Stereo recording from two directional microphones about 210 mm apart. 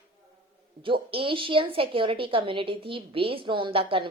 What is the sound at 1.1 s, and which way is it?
A woman's voice, 25° right (ahead or behind).